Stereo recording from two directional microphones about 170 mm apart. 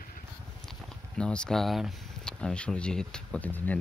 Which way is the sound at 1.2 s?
5° left (ahead or behind).